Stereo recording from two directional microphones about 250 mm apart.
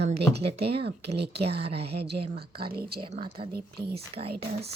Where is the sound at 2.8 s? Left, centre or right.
Right.